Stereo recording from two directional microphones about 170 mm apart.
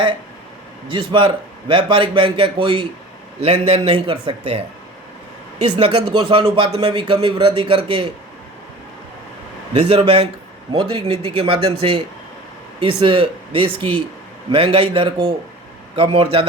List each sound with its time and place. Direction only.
0.9 s a man's voice: 30° right (ahead or behind)
5.7 s a man's voice: 30° right (ahead or behind)
9.9 s speech: 35° right (ahead or behind)